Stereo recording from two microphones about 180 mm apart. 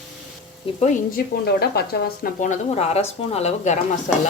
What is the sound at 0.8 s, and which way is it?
Speech, 45° left (ahead or behind).